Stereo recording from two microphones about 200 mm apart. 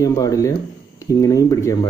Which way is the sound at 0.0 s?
15° left (ahead or behind).